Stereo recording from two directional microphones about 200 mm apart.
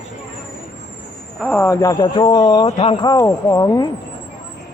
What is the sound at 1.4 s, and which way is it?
Speech, 10° left (ahead or behind).